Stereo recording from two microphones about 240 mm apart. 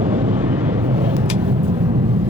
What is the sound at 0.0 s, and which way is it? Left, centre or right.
Vehicle, centre.